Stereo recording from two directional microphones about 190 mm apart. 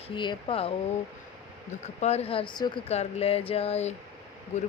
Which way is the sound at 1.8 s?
35° left (ahead or behind).